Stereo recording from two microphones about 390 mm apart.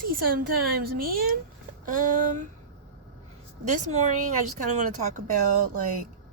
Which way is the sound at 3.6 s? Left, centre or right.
Centre.